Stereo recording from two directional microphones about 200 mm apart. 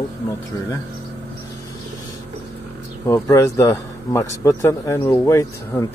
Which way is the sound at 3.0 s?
15° left (ahead or behind).